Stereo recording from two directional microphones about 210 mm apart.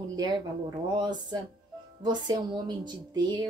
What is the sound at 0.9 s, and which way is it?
Speech, 20° right (ahead or behind).